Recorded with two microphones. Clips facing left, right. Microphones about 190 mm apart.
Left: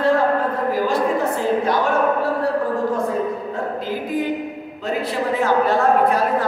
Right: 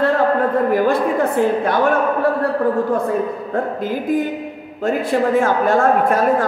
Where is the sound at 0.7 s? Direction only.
55° right (ahead or behind).